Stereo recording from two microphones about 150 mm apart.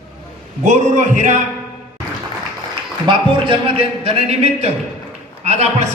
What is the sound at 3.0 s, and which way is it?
A man's voice, 35° right (ahead or behind).